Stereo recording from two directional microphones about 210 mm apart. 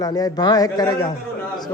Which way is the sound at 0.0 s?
15° left (ahead or behind).